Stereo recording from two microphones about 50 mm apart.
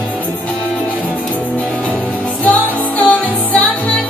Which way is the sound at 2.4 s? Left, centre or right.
Left.